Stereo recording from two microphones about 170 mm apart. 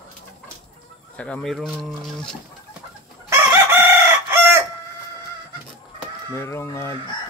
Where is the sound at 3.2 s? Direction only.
15° right (ahead or behind).